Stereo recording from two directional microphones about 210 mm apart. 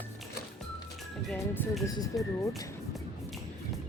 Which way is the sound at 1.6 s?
10° left (ahead or behind).